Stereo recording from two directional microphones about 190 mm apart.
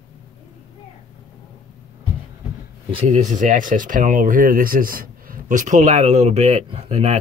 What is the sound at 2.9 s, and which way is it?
Speech, 40° right (ahead or behind).